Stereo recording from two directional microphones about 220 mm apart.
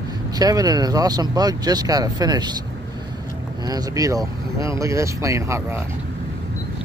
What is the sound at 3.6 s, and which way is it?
Speech, 15° right (ahead or behind).